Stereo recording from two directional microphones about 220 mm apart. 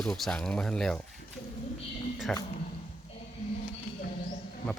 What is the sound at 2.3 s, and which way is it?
Speech, 5° left (ahead or behind).